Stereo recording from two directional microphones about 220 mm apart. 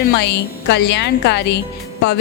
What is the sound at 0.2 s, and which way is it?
Speech, 50° left (ahead or behind).